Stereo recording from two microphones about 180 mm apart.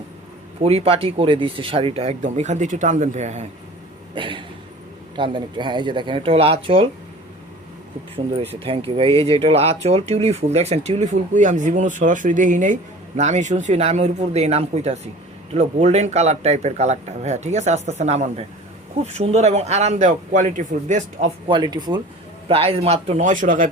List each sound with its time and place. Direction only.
0.6 s speech: 35° right (ahead or behind)
4.1 s a sound: 25° right (ahead or behind)
5.1 s speech: 25° right (ahead or behind)
9.0 s speech: 30° right (ahead or behind)
21.4 s speech: 25° right (ahead or behind); by 23.7 s 45° right (ahead or behind)